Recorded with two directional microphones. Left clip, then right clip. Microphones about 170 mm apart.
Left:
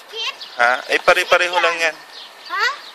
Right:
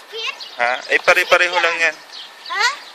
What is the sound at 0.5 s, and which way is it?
A man's voice, 20° left (ahead or behind).